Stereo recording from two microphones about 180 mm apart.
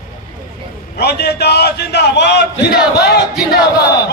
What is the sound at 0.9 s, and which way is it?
A man's voice, 65° left (ahead or behind).